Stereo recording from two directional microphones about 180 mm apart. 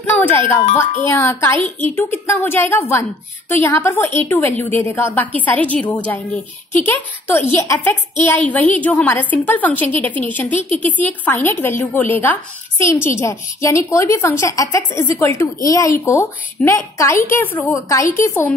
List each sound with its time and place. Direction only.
0.0 s a woman's voice: 10° left (ahead or behind)